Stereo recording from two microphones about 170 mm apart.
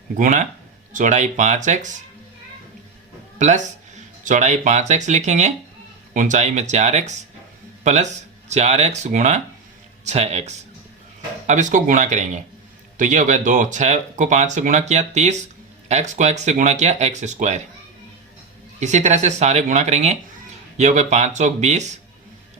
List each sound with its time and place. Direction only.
0.2 s speech: 50° right (ahead or behind)
3.3 s speech: 45° right (ahead or behind)
18.8 s speech: 45° right (ahead or behind)